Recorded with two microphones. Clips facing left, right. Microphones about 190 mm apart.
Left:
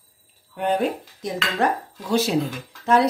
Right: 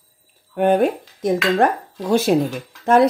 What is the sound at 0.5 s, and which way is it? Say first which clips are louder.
Speech: right 6 dB; 50° right (ahead or behind).